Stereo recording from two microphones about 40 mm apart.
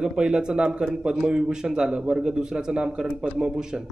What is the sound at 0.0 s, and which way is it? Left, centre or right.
A man's voice, right.